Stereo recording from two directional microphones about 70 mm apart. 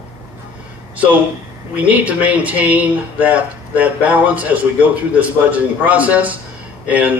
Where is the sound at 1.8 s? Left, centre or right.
Right.